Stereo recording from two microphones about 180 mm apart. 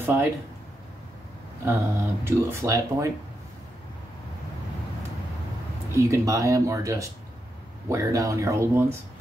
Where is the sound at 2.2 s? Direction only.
15° right (ahead or behind).